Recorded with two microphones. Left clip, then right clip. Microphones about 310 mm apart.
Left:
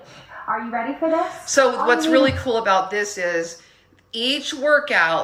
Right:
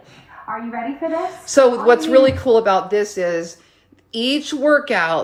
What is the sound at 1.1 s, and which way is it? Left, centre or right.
A woman's voice, right.